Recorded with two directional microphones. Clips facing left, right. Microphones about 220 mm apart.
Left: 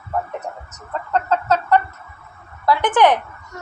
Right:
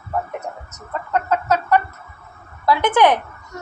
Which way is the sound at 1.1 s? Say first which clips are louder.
Even; 15° right (ahead or behind).